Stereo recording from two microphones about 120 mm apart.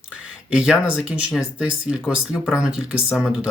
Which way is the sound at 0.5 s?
5° right (ahead or behind).